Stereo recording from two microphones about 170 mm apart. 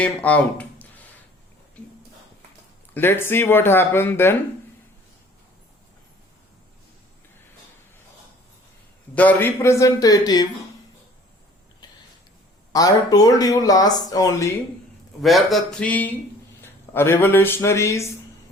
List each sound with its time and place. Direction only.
0.0 s speech: 10° left (ahead or behind)
2.9 s speech: 10° left (ahead or behind)
9.1 s speech: 10° left (ahead or behind)
11.8 s a sound: 25° left (ahead or behind)
12.7 s speech: 20° left (ahead or behind)
15.2 s speech: centre (ahead or behind); by 18.0 s 15° left (ahead or behind)